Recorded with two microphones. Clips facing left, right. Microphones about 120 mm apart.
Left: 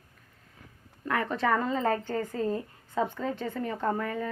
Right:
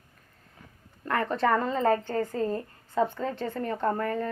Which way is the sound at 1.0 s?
5° left (ahead or behind).